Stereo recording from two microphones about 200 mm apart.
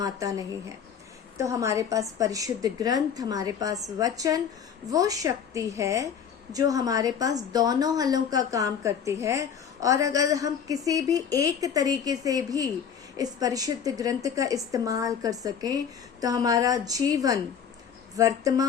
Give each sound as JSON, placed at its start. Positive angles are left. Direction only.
{"t": 0.0, "sound": "a woman's voice", "side_deg": -15}